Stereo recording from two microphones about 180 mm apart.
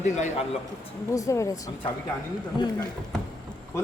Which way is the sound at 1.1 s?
20° left (ahead or behind).